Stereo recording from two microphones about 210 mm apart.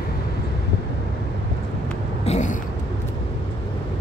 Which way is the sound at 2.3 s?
35° left (ahead or behind).